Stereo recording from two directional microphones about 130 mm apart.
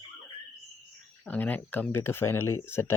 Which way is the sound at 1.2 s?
10° left (ahead or behind).